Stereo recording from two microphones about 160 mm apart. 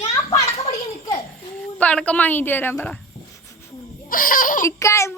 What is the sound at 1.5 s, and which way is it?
A woman's voice, 10° left (ahead or behind).